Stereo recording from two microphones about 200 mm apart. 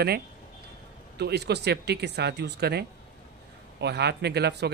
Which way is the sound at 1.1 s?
55° right (ahead or behind).